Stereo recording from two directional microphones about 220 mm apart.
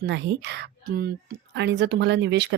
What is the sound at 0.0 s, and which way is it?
Speech, 50° right (ahead or behind).